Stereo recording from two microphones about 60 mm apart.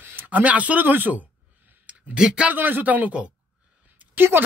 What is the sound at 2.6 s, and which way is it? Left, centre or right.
Speech, right.